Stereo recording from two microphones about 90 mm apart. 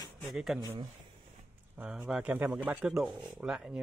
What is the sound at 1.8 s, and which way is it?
A man's voice, 10° right (ahead or behind).